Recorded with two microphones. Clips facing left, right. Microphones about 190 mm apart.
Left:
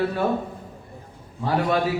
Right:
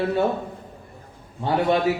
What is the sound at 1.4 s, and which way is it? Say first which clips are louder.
Speech: right 2 dB; 25° right (ahead or behind).